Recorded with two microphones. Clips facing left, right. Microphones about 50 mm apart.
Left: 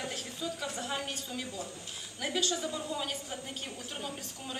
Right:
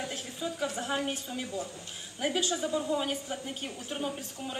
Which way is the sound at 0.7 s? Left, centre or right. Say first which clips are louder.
Right 4 dB; centre.